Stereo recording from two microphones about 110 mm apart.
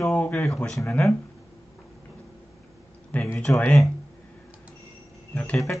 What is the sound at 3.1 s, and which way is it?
Speech, 10° left (ahead or behind).